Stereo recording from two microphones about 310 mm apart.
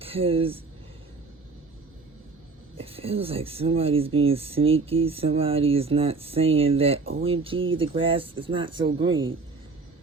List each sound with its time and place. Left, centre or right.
0.0 s speech: centre
2.7 s speech: centre
7.0 s speech: right
7.8 s speech: centre